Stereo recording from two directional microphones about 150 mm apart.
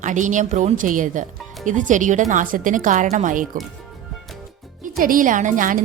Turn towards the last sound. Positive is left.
turn(degrees=-60)  # may be behind; listen again after turning